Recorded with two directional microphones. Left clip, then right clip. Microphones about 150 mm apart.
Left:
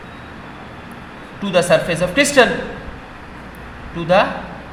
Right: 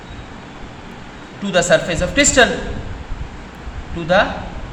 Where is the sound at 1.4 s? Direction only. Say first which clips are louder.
Even; 30° left (ahead or behind).